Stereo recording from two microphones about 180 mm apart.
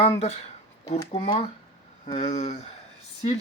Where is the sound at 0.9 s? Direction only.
30° left (ahead or behind).